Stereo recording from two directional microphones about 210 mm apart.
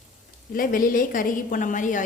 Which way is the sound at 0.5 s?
40° left (ahead or behind).